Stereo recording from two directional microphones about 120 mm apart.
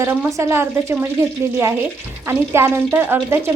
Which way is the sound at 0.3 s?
25° right (ahead or behind).